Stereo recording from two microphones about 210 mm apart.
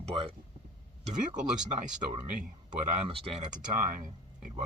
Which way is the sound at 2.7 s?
25° right (ahead or behind).